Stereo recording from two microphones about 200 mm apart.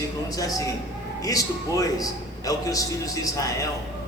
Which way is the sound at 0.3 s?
15° left (ahead or behind).